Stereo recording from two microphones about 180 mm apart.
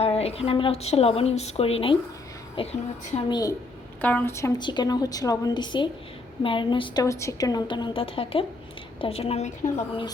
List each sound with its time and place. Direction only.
0.0 s a woman's voice: 35° left (ahead or behind)
4.0 s a woman's voice: 10° left (ahead or behind); by 9.8 s 35° left (ahead or behind)